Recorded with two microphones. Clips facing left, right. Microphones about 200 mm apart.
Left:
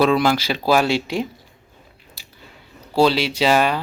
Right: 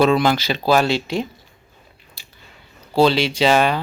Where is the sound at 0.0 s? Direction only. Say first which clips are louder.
Right 1 dB; 5° left (ahead or behind).